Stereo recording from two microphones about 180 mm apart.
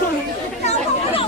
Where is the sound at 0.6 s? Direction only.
40° left (ahead or behind).